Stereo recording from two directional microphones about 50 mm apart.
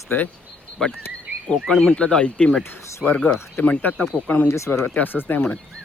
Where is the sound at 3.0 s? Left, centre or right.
Centre.